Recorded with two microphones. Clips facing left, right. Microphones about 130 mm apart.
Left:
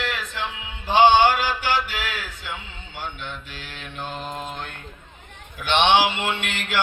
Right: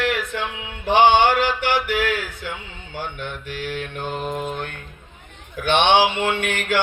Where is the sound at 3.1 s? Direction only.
55° right (ahead or behind).